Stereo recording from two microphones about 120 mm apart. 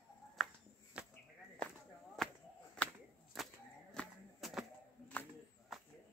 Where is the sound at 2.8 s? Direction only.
10° left (ahead or behind).